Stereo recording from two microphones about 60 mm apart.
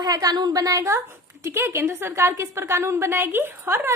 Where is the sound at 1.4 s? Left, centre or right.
Right.